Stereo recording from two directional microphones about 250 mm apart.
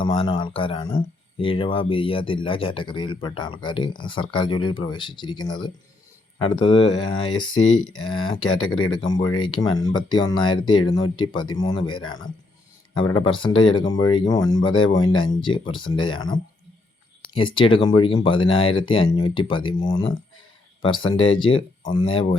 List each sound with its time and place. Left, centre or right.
0.0 s speech: left